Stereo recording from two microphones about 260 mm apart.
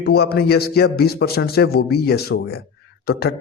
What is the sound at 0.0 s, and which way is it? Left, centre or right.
A man's voice, left.